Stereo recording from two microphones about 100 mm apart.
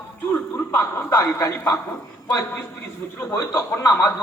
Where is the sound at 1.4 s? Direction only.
30° left (ahead or behind).